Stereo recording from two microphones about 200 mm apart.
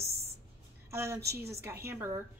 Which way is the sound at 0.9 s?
15° right (ahead or behind).